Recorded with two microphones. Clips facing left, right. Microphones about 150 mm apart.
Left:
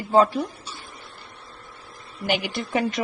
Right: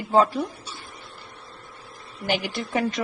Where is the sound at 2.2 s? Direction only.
5° left (ahead or behind).